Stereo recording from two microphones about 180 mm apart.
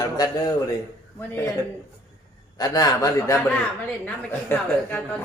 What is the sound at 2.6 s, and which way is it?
A man's voice, 20° left (ahead or behind).